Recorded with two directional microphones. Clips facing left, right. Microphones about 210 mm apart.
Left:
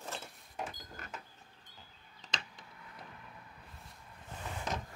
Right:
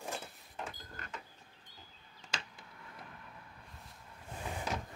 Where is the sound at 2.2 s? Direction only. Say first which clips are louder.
Even; 10° right (ahead or behind).